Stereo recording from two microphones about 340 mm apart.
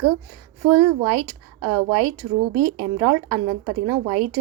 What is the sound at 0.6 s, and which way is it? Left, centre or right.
Speech, right.